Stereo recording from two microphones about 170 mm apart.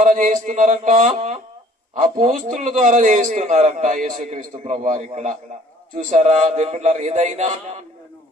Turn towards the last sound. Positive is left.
turn(degrees=-45)  # may be behind; listen again after turning